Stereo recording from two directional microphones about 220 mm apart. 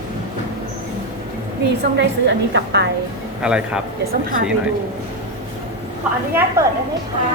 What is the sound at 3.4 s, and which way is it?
Speech, 5° right (ahead or behind).